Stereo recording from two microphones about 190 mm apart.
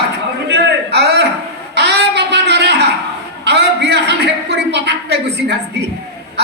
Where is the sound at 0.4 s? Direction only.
60° right (ahead or behind).